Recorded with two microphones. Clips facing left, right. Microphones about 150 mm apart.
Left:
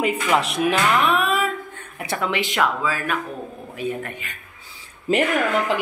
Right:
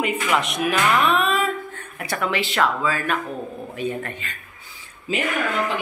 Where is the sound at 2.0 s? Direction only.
20° left (ahead or behind).